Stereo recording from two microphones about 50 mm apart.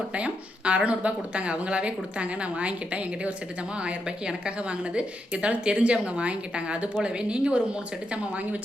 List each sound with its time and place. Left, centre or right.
0.1 s speech: right